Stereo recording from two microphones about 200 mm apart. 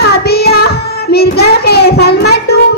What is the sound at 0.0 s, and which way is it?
Child singing, 55° left (ahead or behind).